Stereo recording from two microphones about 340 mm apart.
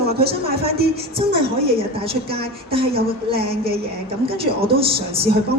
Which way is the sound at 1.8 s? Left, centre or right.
Centre.